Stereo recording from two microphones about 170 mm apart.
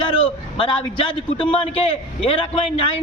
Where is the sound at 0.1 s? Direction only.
30° left (ahead or behind).